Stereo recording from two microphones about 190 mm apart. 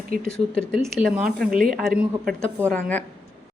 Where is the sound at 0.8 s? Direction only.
10° right (ahead or behind).